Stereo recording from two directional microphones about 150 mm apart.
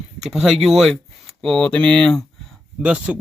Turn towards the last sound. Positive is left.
turn(degrees=-5)  # may be behind; listen again after turning